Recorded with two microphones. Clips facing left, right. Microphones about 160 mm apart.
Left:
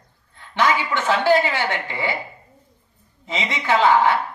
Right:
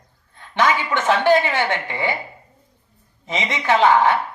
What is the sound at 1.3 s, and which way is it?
Speech, 20° right (ahead or behind).